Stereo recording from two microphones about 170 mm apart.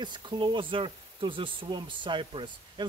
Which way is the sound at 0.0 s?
25° right (ahead or behind).